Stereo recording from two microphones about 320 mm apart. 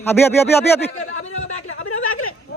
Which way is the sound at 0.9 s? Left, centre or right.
Left.